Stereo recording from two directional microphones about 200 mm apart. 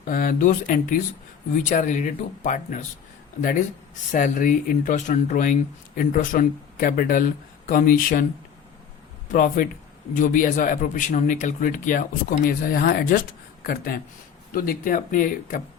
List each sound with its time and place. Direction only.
0.0 s a man's voice: 45° left (ahead or behind)
4.1 s a man's voice: 40° left (ahead or behind)
9.3 s a man's voice: 45° left (ahead or behind)